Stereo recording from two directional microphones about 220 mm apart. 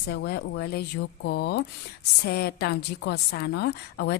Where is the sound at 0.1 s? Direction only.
50° left (ahead or behind).